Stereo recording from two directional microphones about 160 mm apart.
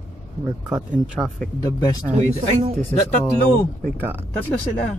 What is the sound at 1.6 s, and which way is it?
Speech, 20° left (ahead or behind).